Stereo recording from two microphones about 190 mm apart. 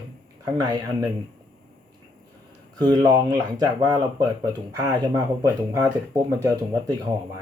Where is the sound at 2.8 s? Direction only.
20° right (ahead or behind).